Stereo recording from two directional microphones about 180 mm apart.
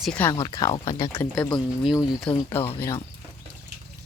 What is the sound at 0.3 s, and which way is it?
Speech, 25° left (ahead or behind).